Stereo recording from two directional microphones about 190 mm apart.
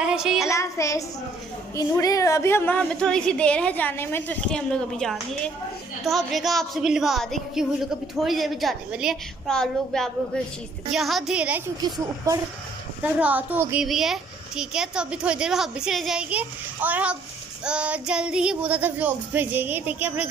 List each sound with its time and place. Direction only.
0.0 s child singing: 5° right (ahead or behind)
0.5 s a woman's voice: 15° left (ahead or behind); by 11.6 s 5° right (ahead or behind)
13.0 s child singing: 10° right (ahead or behind)
13.8 s a woman's voice: centre (ahead or behind)
17.6 s child singing: 5° right (ahead or behind)